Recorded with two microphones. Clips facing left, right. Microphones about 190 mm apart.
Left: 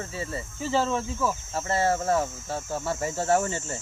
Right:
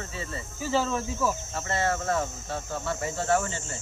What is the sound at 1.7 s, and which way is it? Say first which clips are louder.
Speech: left 3 dB; 30° left (ahead or behind).